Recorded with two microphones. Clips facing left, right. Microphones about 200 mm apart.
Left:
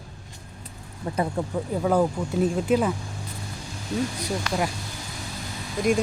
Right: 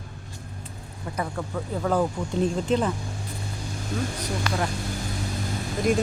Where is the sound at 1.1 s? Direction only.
25° left (ahead or behind).